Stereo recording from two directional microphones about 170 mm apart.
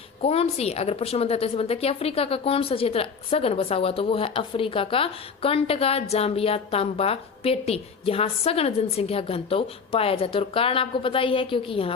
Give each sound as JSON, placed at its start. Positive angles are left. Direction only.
{"t": 0.2, "sound": "a woman's voice", "side_deg": 35}